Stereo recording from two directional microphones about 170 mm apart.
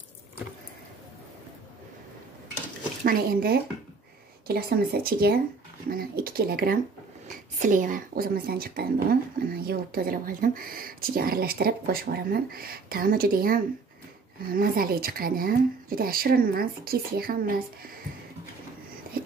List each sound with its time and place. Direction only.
3.0 s a woman's voice: 55° right (ahead or behind)